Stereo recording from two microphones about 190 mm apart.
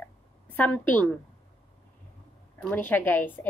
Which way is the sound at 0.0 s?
10° left (ahead or behind).